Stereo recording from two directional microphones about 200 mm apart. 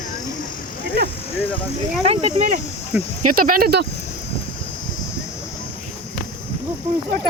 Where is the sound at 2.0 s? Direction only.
30° right (ahead or behind).